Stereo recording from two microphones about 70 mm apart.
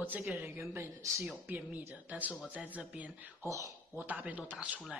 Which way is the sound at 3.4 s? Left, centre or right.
Right.